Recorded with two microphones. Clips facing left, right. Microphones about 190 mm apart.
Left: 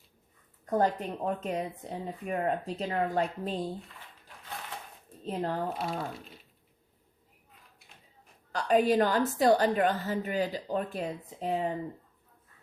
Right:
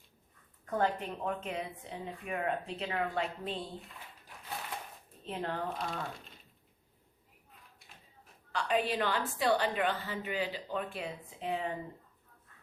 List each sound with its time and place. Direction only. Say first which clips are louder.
0.6 s speech: left 4 dB; 40° left (ahead or behind)
5.2 s speech: left 5 dB; 40° left (ahead or behind)
8.5 s a woman's voice: left 7 dB; 45° left (ahead or behind)